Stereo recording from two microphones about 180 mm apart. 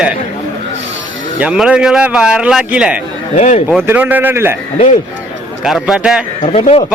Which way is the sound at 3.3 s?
40° left (ahead or behind).